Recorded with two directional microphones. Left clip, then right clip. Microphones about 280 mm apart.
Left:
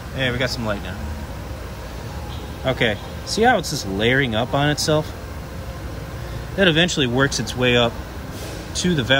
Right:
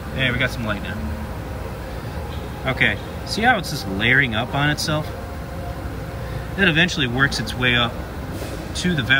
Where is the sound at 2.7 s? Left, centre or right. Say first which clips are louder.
Right 1 dB; centre.